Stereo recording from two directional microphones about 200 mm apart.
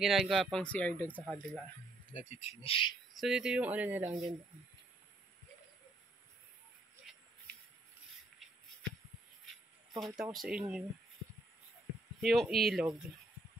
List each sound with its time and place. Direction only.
0.0 s speech: centre (ahead or behind)
2.1 s speech: 35° left (ahead or behind)
3.2 s speech: 5° right (ahead or behind)
9.9 s speech: centre (ahead or behind)
12.2 s speech: centre (ahead or behind)